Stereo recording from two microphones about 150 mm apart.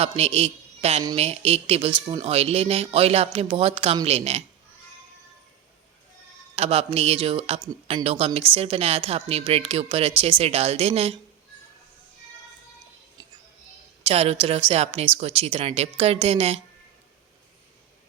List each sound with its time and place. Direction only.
0.0 s a man's voice: 45° right (ahead or behind)
6.6 s speech: 45° right (ahead or behind)
14.0 s speech: 40° right (ahead or behind)